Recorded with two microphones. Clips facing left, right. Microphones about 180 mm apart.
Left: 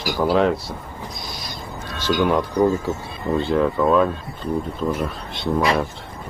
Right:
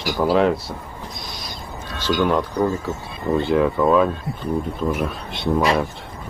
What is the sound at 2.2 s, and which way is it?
Speech, 15° left (ahead or behind).